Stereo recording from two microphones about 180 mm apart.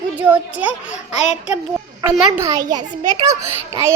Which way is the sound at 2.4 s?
20° right (ahead or behind).